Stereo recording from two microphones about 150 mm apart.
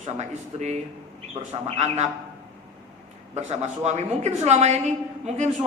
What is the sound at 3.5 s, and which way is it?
Speech, 45° right (ahead or behind).